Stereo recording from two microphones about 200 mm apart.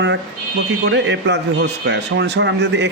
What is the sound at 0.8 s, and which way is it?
Speech, 60° right (ahead or behind).